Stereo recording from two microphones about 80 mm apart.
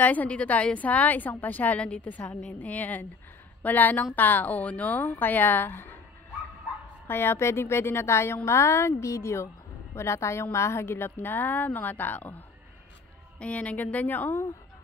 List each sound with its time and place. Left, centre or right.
0.0 s a woman's voice: centre
7.1 s a woman's voice: left
13.4 s a woman's voice: centre